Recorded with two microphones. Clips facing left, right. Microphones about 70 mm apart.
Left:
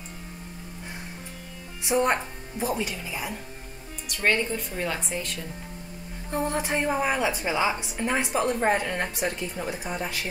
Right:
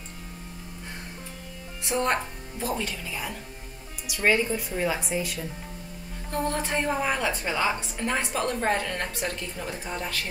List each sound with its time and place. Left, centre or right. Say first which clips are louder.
1.8 s a woman's voice: left 2 dB; centre
4.0 s speech: right 1 dB; centre
6.3 s a woman's voice: left 1 dB; centre